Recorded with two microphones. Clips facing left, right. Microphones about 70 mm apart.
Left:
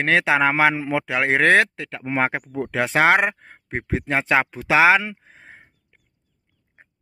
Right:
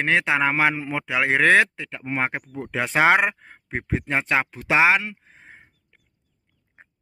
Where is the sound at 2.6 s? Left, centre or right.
Left.